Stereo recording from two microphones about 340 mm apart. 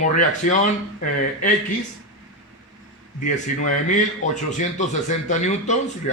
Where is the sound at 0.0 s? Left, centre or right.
Left.